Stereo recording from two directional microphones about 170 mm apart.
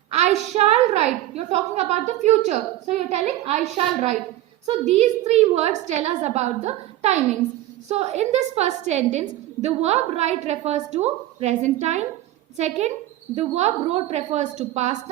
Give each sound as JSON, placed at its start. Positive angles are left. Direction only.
{"t": 0.5, "sound": "a woman's voice", "side_deg": -40}
{"t": 4.6, "sound": "a woman's voice", "side_deg": -35}